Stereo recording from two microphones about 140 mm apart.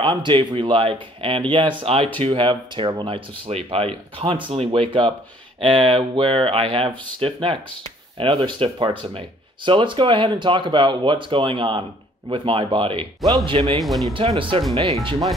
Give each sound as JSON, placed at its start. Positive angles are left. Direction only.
{"t": 0.0, "sound": "speech", "side_deg": -35}
{"t": 13.7, "sound": "speech", "side_deg": 0}
{"t": 14.1, "sound": "speech", "side_deg": -40}